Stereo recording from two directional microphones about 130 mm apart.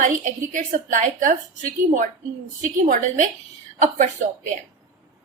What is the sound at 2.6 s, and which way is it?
Speech, 85° right.